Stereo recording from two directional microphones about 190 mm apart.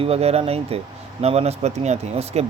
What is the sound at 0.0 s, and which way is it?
Speech, 30° right (ahead or behind).